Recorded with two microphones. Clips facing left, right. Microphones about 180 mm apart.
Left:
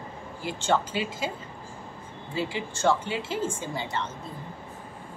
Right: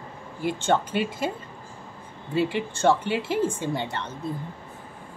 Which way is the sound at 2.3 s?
60° right (ahead or behind).